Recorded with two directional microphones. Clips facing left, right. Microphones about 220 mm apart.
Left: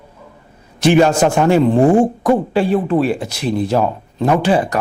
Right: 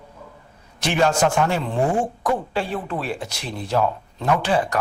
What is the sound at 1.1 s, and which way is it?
Speech, 20° left (ahead or behind).